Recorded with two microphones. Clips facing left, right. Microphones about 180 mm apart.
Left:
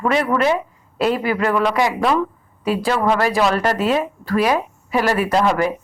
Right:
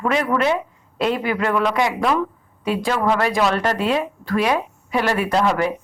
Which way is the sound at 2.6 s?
40° left (ahead or behind).